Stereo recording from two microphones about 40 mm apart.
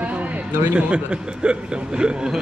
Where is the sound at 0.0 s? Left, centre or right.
Right.